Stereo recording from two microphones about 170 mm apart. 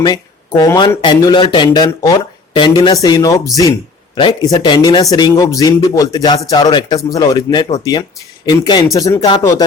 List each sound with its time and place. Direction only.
0.0 s speech: 25° left (ahead or behind)